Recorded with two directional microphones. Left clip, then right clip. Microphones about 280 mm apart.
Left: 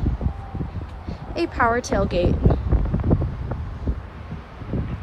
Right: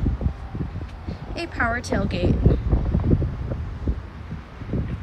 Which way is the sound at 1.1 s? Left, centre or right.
Centre.